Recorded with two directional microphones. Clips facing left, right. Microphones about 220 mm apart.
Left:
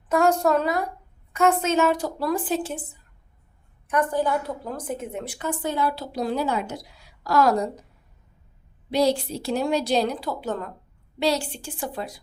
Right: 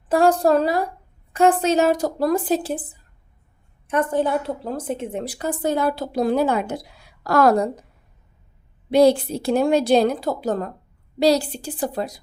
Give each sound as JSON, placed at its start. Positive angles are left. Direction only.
{"t": 0.1, "sound": "a woman's voice", "side_deg": -35}
{"t": 3.8, "sound": "a woman's voice", "side_deg": -25}
{"t": 8.9, "sound": "a woman's voice", "side_deg": -55}